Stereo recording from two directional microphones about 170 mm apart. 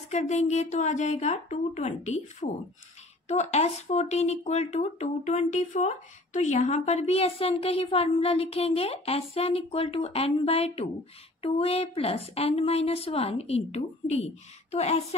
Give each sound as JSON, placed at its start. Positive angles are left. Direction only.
{"t": 0.1, "sound": "a woman's voice", "side_deg": 40}